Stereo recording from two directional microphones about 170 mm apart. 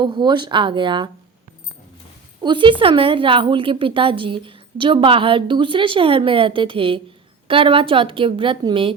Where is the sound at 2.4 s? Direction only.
30° right (ahead or behind).